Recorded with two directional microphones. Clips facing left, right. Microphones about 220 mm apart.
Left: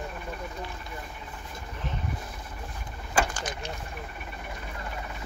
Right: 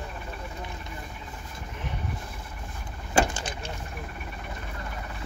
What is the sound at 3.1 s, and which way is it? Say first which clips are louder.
Vehicle: right 3 dB; 25° right (ahead or behind).